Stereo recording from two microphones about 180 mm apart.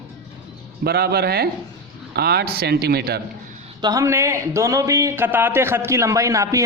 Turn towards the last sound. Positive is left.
turn(degrees=-15)  # may be behind; listen again after turning